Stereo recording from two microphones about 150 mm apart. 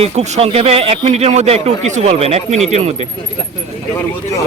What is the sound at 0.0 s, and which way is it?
Speech, 45° right (ahead or behind).